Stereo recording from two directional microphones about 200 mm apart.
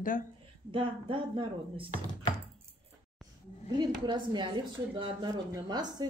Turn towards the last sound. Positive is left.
turn(degrees=-20)  # may be behind; listen again after turning